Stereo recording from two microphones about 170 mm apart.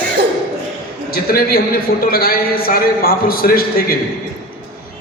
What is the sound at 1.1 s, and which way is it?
A man's voice, 60° left (ahead or behind).